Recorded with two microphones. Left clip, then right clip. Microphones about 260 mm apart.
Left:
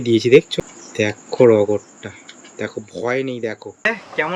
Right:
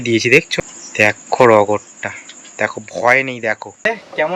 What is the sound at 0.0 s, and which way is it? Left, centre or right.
Speech, centre.